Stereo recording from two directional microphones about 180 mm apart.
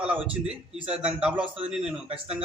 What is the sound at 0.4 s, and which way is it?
Speech, 30° right (ahead or behind).